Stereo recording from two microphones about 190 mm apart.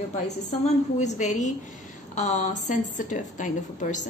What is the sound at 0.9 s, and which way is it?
A woman's voice, 40° left (ahead or behind).